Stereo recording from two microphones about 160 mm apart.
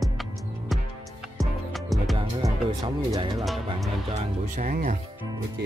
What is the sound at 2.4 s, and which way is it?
Speech, 25° right (ahead or behind).